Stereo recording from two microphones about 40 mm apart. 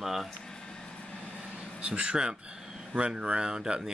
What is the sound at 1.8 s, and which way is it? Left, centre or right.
Speech, right.